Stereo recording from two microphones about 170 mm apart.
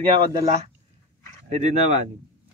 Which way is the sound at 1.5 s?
40° right (ahead or behind).